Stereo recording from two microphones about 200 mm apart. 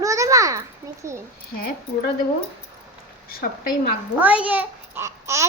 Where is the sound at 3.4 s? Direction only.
50° left (ahead or behind).